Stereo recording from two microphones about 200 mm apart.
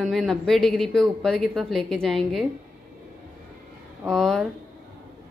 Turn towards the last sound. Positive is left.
turn(degrees=0)  # may be behind; listen again after turning